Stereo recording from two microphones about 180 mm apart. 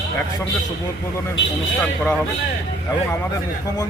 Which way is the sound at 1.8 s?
5° left (ahead or behind).